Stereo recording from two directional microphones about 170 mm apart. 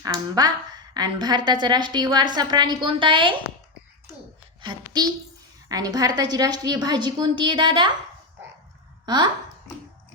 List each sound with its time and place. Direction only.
0.9 s a woman's voice: 25° right (ahead or behind)
4.6 s a child's voice: 25° right (ahead or behind)
9.0 s speech: 25° right (ahead or behind)